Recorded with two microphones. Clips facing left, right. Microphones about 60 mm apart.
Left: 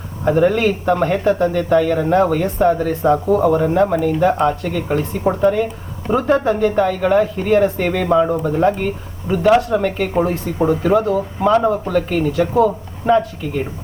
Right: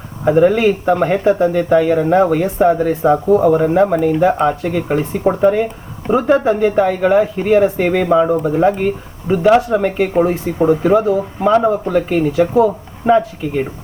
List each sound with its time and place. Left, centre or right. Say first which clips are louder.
0.3 s speech: right 3 dB; centre